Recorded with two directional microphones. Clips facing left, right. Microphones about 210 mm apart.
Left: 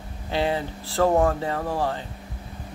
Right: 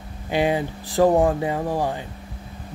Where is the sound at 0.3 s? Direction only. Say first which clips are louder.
Right 3 dB; 15° right (ahead or behind).